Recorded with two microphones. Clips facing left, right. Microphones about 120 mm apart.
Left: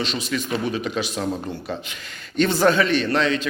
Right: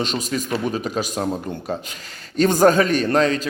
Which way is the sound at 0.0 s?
45° right (ahead or behind).